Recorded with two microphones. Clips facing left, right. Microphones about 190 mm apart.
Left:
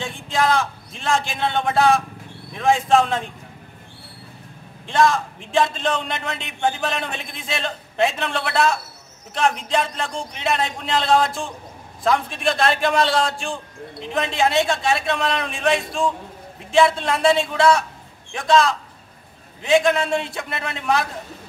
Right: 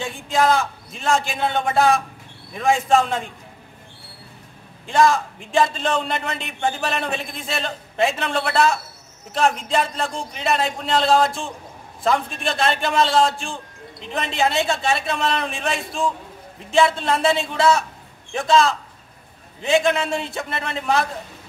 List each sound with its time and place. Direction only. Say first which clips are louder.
0.0 s a man's voice: right 2 dB; 5° right (ahead or behind)
4.8 s a man's voice: right 1 dB; centre (ahead or behind)